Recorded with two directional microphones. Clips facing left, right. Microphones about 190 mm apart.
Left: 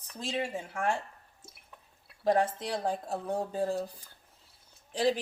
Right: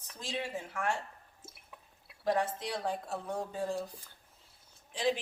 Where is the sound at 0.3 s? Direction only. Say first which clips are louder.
Left 4 dB; 35° left (ahead or behind).